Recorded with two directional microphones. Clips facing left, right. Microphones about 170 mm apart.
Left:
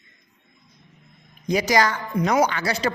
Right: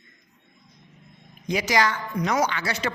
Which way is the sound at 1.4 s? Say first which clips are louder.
Left 3 dB; 40° left (ahead or behind).